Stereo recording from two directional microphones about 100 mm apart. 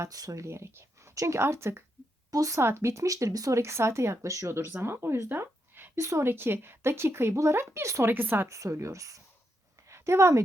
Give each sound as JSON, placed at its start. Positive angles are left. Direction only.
{"t": 0.0, "sound": "speech", "side_deg": -35}
{"t": 8.4, "sound": "speech", "side_deg": -30}
{"t": 9.8, "sound": "a sound", "side_deg": -30}